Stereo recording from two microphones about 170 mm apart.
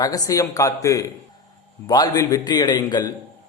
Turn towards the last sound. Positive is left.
turn(degrees=25)  # may be behind; listen again after turning